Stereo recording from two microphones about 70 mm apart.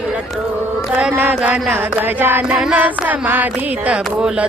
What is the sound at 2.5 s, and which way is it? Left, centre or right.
Music, centre.